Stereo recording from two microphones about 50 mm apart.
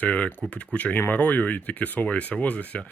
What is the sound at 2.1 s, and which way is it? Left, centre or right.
Speech, left.